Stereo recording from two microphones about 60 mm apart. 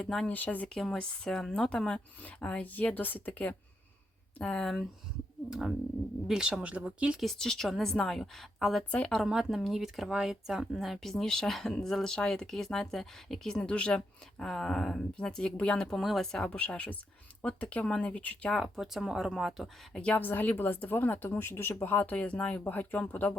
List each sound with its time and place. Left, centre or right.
0.0 s speech: centre
0.3 s speech: left
0.7 s speech: centre; by 3.5 s left
4.4 s speech: centre
4.6 s speech: centre
5.5 s speech: centre
7.2 s speech: centre
16.0 s speech: centre
16.5 s speech: left
18.8 s speech: centre
19.9 s speech: centre
20.1 s speech: left